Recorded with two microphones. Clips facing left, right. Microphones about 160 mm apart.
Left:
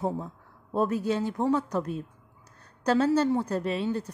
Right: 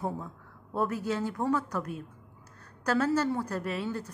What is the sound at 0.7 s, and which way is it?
A woman's voice, 20° left (ahead or behind).